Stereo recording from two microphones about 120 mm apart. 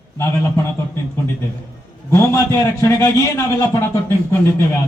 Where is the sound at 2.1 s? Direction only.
20° left (ahead or behind).